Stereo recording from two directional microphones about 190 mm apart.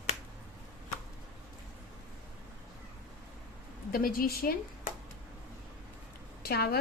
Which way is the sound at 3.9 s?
50° left (ahead or behind).